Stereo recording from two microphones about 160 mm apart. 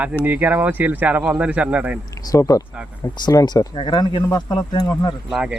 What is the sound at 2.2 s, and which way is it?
Speech, 20° left (ahead or behind).